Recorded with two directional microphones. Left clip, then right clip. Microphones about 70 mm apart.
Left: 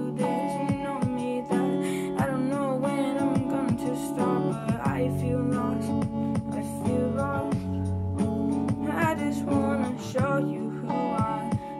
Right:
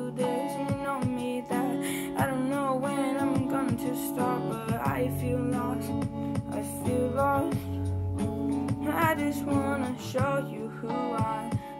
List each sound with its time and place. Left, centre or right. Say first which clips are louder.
0.2 s music: left 1 dB; left
1.6 s music: left 3 dB; right
2.4 s music: left 1 dB; centre
3.4 s music: left 1 dB; centre
4.6 s music: left 1 dB; right
5.5 s music: left 2 dB; left
9.0 s music: right 1 dB; centre
9.6 s music: left 2 dB; right
10.9 s music: left 2 dB; left